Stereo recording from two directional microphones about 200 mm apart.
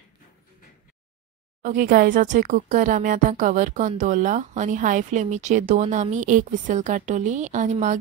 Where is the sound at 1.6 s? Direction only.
40° right (ahead or behind).